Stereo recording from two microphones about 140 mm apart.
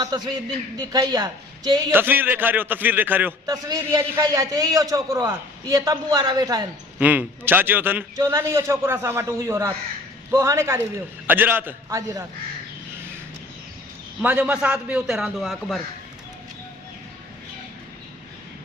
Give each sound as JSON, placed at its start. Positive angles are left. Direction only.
{"t": 0.1, "sound": "a man's voice", "side_deg": -30}
{"t": 1.9, "sound": "a man's voice", "side_deg": -15}
{"t": 3.4, "sound": "a man's voice", "side_deg": -25}
{"t": 7.0, "sound": "a man's voice", "side_deg": -10}
{"t": 14.2, "sound": "a man's voice", "side_deg": -10}